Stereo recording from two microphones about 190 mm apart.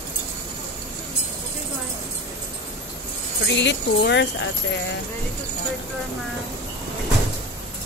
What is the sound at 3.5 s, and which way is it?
Speech, 70° left (ahead or behind).